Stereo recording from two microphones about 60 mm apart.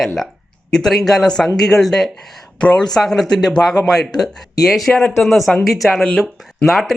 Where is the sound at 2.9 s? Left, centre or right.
Centre.